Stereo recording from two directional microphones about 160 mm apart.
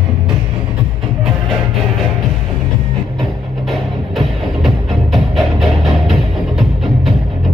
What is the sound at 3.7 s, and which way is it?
Music, centre (ahead or behind).